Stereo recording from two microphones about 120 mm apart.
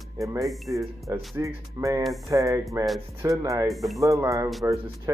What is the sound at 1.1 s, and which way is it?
Speech, 25° right (ahead or behind).